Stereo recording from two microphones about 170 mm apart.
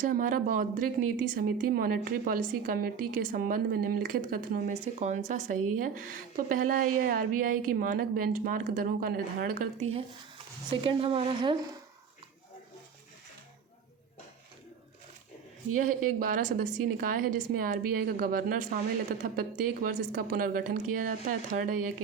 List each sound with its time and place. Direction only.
0.0 s a woman's voice: 50° right (ahead or behind)
4.7 s a woman's voice: 40° right (ahead or behind); by 9.8 s 60° right (ahead or behind)
10.7 s speech: 30° right (ahead or behind)
16.2 s a woman's voice: 50° right (ahead or behind)